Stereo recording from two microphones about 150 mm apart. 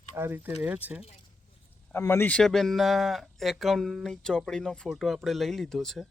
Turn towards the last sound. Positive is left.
turn(degrees=0)  # may be behind; listen again after turning